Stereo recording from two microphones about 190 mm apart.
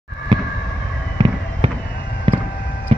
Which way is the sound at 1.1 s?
30° right (ahead or behind).